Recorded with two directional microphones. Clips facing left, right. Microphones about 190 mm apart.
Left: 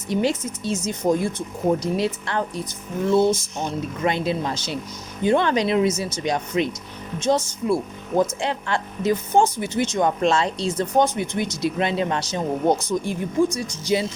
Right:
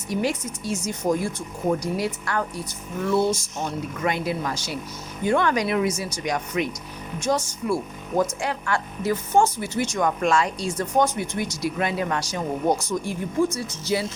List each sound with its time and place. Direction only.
0.1 s speech: 25° left (ahead or behind)